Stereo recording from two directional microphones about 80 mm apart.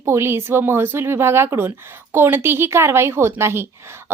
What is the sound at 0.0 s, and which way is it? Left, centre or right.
Speech, right.